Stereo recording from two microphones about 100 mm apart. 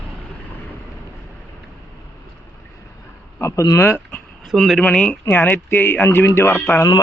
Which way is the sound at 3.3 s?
30° left (ahead or behind).